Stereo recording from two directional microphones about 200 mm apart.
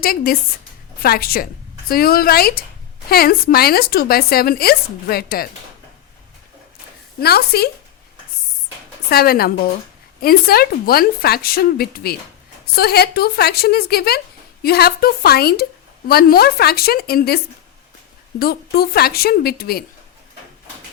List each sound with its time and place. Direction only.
0.0 s speech: 50° left (ahead or behind)
7.2 s speech: 50° left (ahead or behind)
9.0 s speech: 50° left (ahead or behind)